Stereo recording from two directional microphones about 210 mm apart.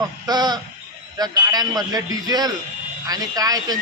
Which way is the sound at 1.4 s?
20° right (ahead or behind).